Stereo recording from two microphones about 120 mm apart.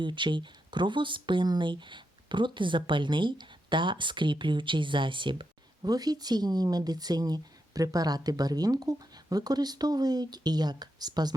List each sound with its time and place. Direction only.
0.0 s speech: 40° right (ahead or behind)